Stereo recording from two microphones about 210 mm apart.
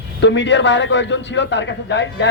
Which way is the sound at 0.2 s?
60° left (ahead or behind).